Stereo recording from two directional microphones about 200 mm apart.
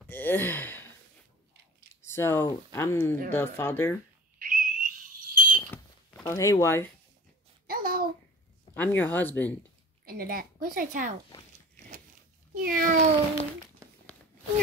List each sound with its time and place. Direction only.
0.1 s sigh: 10° left (ahead or behind)
2.0 s speech: 10° left (ahead or behind)
4.4 s whistle: 45° right (ahead or behind)
5.7 s a sound: 10° left (ahead or behind)
7.6 s babbling: 45° right (ahead or behind)
8.7 s speech: 10° left (ahead or behind)
10.0 s a woman's voice: 45° right (ahead or behind)
12.6 s a woman's voice: 45° right (ahead or behind)